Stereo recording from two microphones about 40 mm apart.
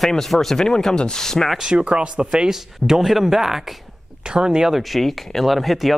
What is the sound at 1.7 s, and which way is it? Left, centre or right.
Speech, right.